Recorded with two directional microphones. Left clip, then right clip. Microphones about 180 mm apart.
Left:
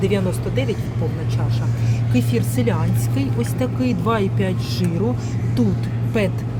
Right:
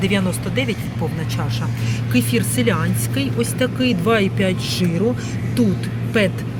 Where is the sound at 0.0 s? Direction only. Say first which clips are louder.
Even; 5° left (ahead or behind).